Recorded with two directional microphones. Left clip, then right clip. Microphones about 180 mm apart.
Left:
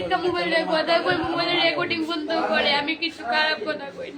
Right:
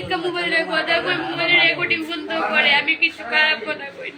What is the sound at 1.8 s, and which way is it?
Speech, 55° left (ahead or behind).